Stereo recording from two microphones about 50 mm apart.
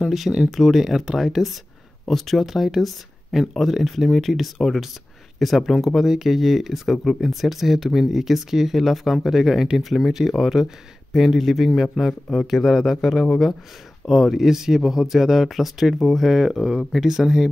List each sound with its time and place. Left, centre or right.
0.0 s speech: centre